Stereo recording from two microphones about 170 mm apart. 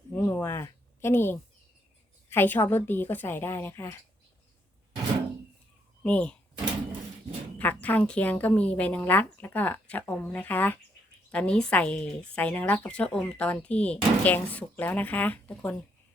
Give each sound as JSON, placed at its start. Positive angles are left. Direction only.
{"t": 0.1, "sound": "a sound", "side_deg": 10}
{"t": 2.3, "sound": "speech", "side_deg": 10}
{"t": 6.0, "sound": "speech", "side_deg": 5}
{"t": 7.6, "sound": "speech", "side_deg": 10}